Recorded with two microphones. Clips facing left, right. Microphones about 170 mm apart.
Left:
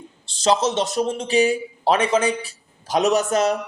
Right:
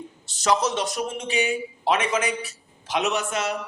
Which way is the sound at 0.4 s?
25° left (ahead or behind).